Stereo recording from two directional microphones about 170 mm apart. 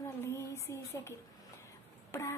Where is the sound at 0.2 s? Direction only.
15° left (ahead or behind).